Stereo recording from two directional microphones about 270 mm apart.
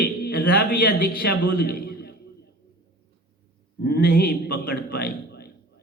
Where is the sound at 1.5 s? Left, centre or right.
Left.